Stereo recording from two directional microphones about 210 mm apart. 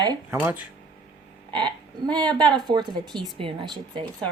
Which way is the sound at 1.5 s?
20° right (ahead or behind).